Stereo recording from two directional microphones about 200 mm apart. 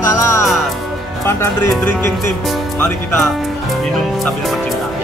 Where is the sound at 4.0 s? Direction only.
Centre (ahead or behind).